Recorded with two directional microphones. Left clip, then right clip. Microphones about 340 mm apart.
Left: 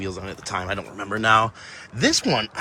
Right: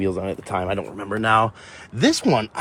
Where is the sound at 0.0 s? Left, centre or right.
Centre.